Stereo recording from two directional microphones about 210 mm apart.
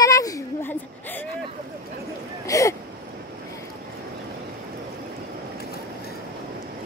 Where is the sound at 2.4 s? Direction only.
15° left (ahead or behind).